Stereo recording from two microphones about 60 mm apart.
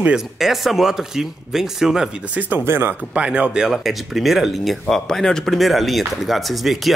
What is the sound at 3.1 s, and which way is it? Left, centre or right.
Speech, right.